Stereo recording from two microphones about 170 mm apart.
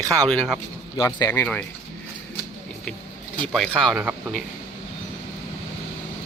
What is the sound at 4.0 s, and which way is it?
Speech, 10° right (ahead or behind).